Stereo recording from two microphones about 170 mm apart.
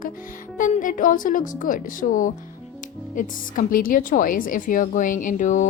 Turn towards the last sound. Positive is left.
turn(degrees=45)  # may be behind; listen again after turning